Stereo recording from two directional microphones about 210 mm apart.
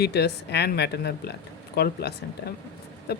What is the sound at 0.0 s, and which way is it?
Speech, 50° left (ahead or behind).